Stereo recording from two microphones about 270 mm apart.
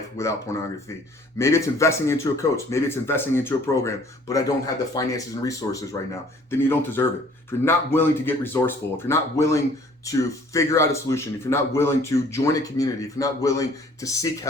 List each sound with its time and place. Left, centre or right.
0.2 s speech: centre